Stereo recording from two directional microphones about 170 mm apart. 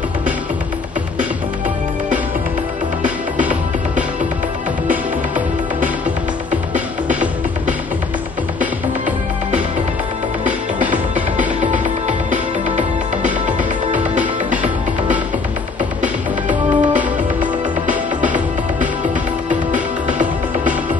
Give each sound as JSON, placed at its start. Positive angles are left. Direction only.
{"t": 6.7, "sound": "music", "side_deg": -10}
{"t": 8.5, "sound": "music", "side_deg": -50}
{"t": 10.8, "sound": "music", "side_deg": -10}
{"t": 11.3, "sound": "music", "side_deg": -45}
{"t": 16.0, "sound": "music", "side_deg": -50}
{"t": 17.4, "sound": "music", "side_deg": -10}